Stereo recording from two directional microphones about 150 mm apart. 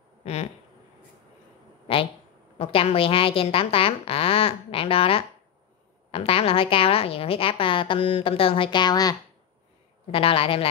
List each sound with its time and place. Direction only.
0.2 s speech: 45° left (ahead or behind)
2.6 s a woman's voice: 40° left (ahead or behind)
10.1 s a woman's voice: 40° left (ahead or behind)